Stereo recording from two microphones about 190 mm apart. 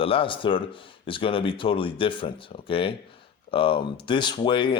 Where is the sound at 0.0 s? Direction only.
30° left (ahead or behind).